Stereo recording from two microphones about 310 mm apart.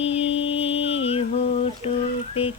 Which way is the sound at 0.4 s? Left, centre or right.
Centre.